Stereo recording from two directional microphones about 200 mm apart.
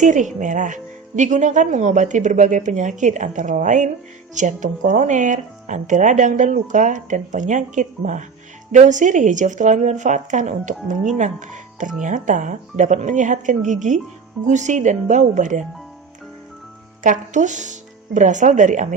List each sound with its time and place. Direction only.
0.0 s speech: 40° right (ahead or behind)
17.0 s speech: 40° right (ahead or behind)